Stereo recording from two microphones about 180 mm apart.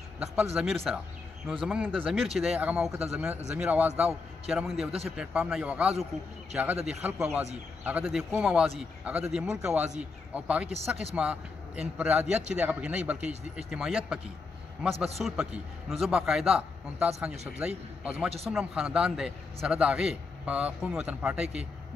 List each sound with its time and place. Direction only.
0.6 s a man's voice: centre (ahead or behind)
10.7 s speech: 35° right (ahead or behind)
11.1 s a man's voice: 5° right (ahead or behind)